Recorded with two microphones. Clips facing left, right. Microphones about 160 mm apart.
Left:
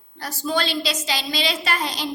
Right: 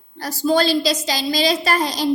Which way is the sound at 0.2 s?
40° right (ahead or behind).